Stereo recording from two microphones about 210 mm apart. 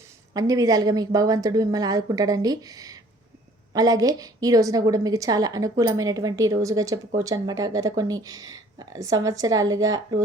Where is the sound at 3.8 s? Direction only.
15° right (ahead or behind).